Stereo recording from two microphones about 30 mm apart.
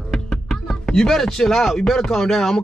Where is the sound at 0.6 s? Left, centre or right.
Left.